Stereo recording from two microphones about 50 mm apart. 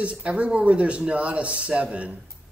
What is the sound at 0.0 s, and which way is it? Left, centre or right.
Speech, right.